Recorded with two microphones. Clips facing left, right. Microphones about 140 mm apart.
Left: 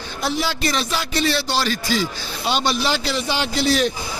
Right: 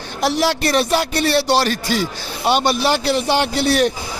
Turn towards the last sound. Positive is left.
turn(degrees=-60)  # may be behind; listen again after turning